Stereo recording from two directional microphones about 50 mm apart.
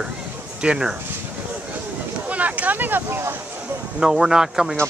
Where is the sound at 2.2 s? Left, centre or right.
Right.